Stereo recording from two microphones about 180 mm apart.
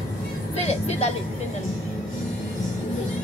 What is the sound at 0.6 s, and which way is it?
Speech, 35° left (ahead or behind).